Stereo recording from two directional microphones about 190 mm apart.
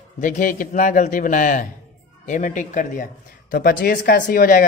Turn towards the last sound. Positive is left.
turn(degrees=50)  # may be behind; listen again after turning